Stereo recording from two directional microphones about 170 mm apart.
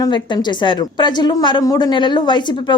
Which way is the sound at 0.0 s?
25° left (ahead or behind).